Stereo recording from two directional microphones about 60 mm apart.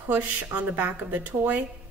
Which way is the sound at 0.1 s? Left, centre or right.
Right.